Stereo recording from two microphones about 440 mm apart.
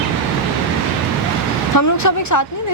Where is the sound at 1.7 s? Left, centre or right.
Left.